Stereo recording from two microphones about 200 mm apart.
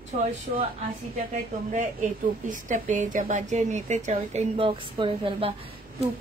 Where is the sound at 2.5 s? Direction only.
40° right (ahead or behind).